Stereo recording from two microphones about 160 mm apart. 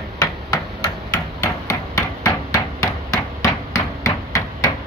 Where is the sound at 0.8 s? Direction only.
20° left (ahead or behind).